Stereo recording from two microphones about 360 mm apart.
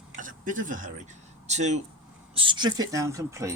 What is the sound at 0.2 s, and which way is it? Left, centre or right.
Speech, right.